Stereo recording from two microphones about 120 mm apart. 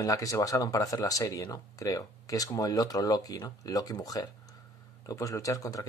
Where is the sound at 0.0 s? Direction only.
30° left (ahead or behind).